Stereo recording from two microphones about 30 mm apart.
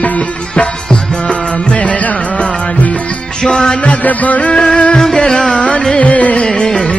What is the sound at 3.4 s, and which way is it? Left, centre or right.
Music, left.